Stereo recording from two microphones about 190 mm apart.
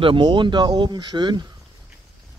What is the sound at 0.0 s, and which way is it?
Speech, 25° right (ahead or behind).